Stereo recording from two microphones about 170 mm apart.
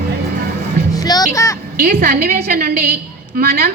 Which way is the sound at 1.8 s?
60° right (ahead or behind).